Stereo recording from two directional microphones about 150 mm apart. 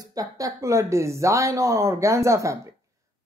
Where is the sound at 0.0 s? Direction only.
25° right (ahead or behind).